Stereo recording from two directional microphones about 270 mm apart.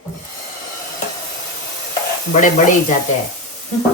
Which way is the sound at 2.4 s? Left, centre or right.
Left.